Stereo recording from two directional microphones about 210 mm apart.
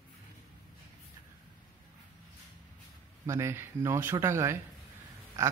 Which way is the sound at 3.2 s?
15° right (ahead or behind).